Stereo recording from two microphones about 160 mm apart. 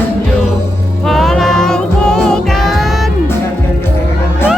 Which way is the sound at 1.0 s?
Centre (ahead or behind).